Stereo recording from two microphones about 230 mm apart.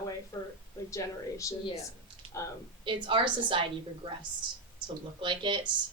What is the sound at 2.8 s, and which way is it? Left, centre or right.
A woman's voice, right.